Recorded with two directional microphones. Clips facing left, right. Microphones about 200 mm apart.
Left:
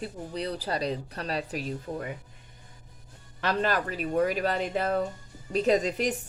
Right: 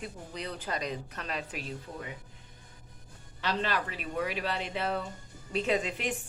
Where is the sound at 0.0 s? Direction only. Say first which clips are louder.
Left 6 dB; 35° left (ahead or behind).